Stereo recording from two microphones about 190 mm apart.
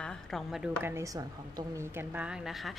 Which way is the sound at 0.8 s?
15° right (ahead or behind).